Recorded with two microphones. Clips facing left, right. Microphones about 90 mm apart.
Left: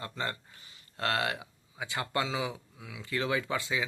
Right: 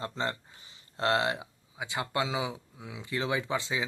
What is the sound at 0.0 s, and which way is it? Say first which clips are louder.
Speech: right 3 dB; 25° right (ahead or behind).